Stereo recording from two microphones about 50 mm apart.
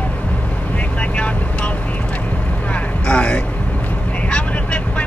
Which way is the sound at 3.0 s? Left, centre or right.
Left.